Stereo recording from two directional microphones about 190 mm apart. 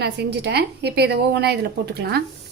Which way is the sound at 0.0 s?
60° right (ahead or behind).